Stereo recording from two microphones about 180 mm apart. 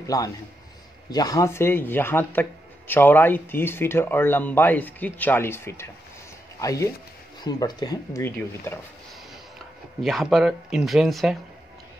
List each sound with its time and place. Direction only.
0.0 s a man's voice: 20° left (ahead or behind)
10.0 s speech: centre (ahead or behind)